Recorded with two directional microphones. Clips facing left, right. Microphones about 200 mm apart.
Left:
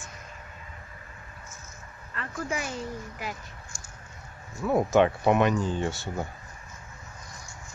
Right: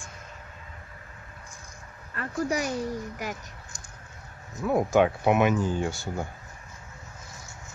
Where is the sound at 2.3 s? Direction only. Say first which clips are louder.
Right 5 dB; 40° right (ahead or behind).